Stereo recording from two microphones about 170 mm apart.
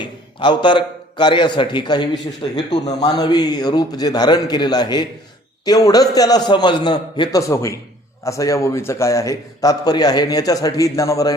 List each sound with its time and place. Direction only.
0.0 s a man's voice: 25° left (ahead or behind)